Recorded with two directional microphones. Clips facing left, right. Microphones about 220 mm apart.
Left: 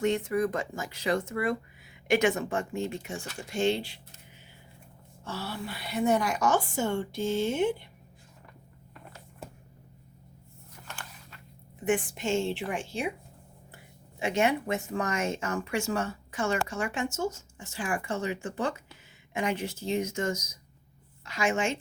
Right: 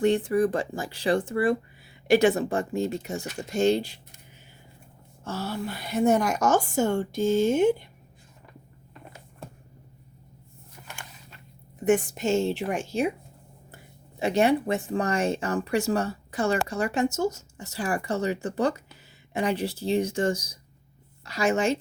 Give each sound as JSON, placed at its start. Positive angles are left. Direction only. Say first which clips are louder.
{"t": 0.0, "sound": "speech", "louder": "right 5 dB", "side_deg": -35}
{"t": 5.2, "sound": "a woman's voice", "louder": "right 5 dB", "side_deg": -45}
{"t": 10.8, "sound": "biting", "louder": "even", "side_deg": -15}
{"t": 11.9, "sound": "speech", "louder": "right 5 dB", "side_deg": -40}
{"t": 14.2, "sound": "speech", "louder": "right 5 dB", "side_deg": -35}